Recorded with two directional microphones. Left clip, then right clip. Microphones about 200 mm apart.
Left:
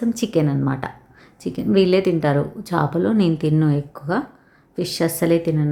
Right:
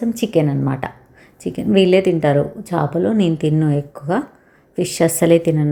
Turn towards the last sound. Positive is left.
turn(degrees=-10)  # may be behind; listen again after turning